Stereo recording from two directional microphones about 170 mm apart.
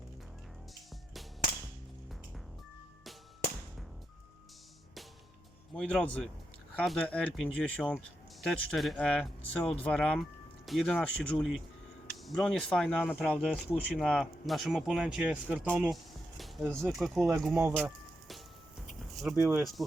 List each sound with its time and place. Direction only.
5.7 s a man's voice: 5° left (ahead or behind)
16.4 s music: centre (ahead or behind)
16.9 s speech: centre (ahead or behind)
17.4 s music: centre (ahead or behind)
19.1 s speech: centre (ahead or behind)
19.4 s speech: 15° right (ahead or behind)